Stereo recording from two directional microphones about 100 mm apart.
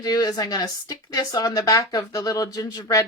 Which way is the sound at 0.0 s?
40° left (ahead or behind).